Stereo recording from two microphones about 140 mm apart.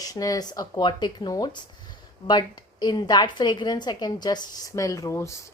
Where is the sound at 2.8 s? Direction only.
30° left (ahead or behind).